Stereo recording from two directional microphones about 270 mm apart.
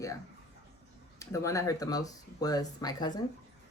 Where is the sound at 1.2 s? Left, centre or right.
Centre.